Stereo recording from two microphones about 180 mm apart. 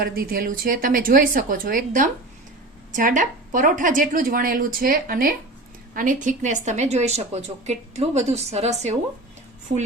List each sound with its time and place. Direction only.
0.0 s a woman's voice: 55° right (ahead or behind); by 9.0 s 40° right (ahead or behind)